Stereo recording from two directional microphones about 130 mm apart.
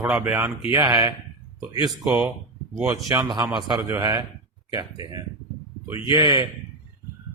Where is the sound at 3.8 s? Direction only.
20° right (ahead or behind).